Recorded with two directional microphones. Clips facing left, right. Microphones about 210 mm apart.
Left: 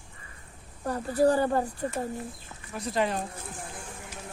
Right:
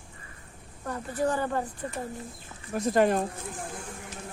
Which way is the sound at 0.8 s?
35° left (ahead or behind).